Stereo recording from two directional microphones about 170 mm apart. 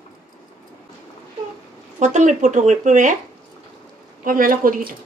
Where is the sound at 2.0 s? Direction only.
45° right (ahead or behind).